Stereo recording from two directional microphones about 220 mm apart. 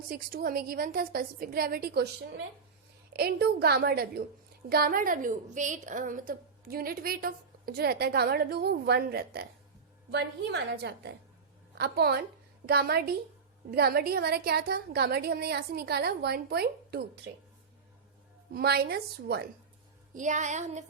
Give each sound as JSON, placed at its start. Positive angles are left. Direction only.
{"t": 0.1, "sound": "a woman's voice", "side_deg": -40}
{"t": 18.5, "sound": "a woman's voice", "side_deg": -45}
{"t": 20.1, "sound": "a sound", "side_deg": -35}